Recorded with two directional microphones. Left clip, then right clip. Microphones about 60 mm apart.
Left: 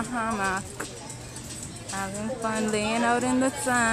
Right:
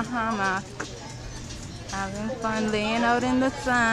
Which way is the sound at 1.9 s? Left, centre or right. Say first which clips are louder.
Right 1 dB; centre.